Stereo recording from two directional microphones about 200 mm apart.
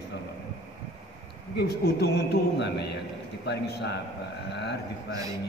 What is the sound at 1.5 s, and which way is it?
A man's voice, 55° left (ahead or behind).